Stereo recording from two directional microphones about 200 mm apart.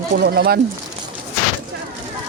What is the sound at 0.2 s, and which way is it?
Speech, 55° right (ahead or behind).